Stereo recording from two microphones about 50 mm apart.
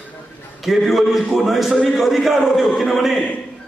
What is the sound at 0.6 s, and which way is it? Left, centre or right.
A man's voice, centre.